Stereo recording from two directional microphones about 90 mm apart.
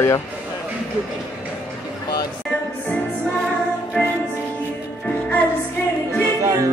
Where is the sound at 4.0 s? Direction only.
10° left (ahead or behind).